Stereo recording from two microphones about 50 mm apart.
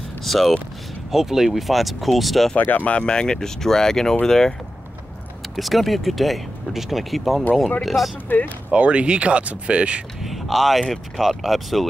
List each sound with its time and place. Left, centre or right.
0.2 s speech: centre
2.8 s speech: left
5.6 s speech: centre
8.3 s speech: left
8.6 s speech: right
10.2 s speech: centre